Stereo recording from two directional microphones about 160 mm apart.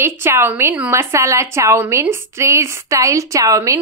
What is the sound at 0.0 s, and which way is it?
A woman's voice, 15° right (ahead or behind).